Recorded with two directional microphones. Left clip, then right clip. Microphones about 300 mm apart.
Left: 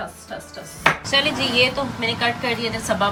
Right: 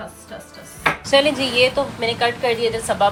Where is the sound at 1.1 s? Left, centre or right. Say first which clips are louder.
Right 3 dB; centre.